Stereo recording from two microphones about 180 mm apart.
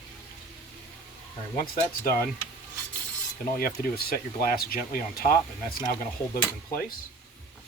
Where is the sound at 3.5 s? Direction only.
55° left (ahead or behind).